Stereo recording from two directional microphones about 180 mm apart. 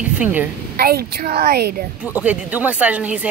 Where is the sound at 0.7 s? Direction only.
60° right (ahead or behind).